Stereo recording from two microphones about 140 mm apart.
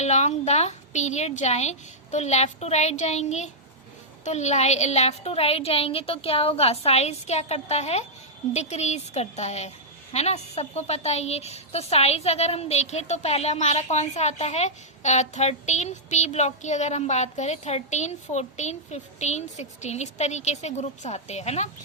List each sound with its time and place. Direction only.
0.0 s a woman's voice: 55° left (ahead or behind)